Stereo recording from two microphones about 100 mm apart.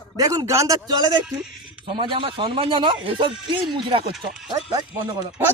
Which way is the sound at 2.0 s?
60° right (ahead or behind).